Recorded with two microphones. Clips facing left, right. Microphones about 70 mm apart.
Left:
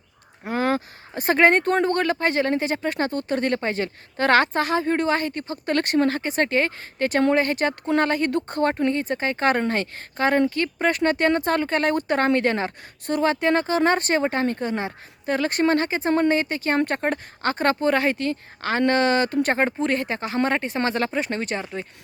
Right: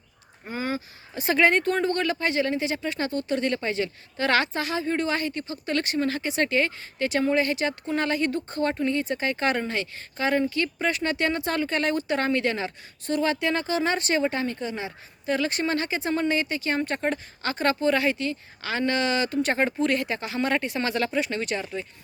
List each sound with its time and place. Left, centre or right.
0.4 s speech: left
8.9 s speech: left